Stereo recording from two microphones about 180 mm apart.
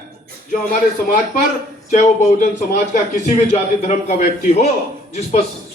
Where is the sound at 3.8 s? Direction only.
40° left (ahead or behind).